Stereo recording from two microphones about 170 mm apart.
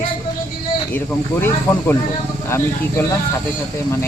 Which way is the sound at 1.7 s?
10° left (ahead or behind).